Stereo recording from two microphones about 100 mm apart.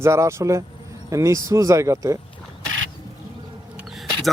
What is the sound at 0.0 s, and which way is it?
Speech, 30° right (ahead or behind).